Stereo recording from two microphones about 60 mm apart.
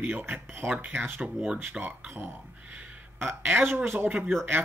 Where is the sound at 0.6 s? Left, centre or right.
Right.